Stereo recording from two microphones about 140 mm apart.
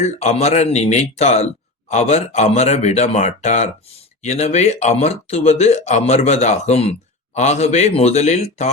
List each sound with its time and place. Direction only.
0.0 s speech: 50° left (ahead or behind)